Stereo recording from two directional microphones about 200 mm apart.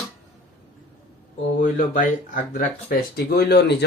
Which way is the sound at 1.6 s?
40° left (ahead or behind).